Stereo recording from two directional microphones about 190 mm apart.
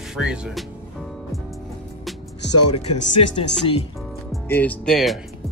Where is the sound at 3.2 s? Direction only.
30° left (ahead or behind).